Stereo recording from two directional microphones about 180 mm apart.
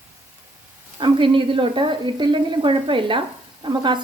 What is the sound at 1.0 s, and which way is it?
Speech, 30° right (ahead or behind).